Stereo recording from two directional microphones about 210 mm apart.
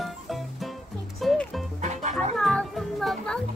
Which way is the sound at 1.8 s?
35° right (ahead or behind).